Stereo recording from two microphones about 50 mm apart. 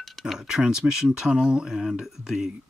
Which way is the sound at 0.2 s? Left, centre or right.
Centre.